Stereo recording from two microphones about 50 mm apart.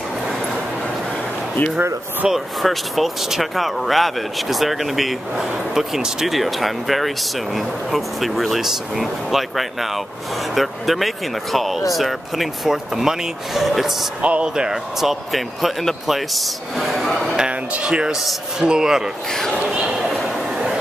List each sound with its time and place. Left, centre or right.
2.2 s speech: centre
2.6 s speech: centre
14.2 s speech: right
15.0 s speech: centre
17.4 s speech: right
19.7 s a sound: centre